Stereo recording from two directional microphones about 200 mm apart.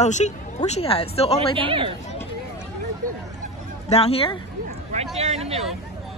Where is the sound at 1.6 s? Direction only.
25° right (ahead or behind).